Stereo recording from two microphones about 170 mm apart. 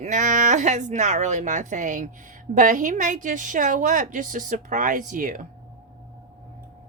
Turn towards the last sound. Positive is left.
turn(degrees=-50)  # may be behind; listen again after turning